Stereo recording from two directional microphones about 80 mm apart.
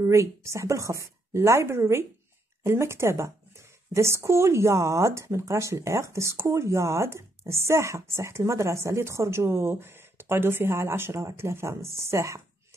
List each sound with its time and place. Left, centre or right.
0.0 s speech: right